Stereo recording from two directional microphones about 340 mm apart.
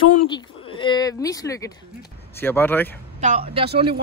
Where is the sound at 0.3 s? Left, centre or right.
Centre.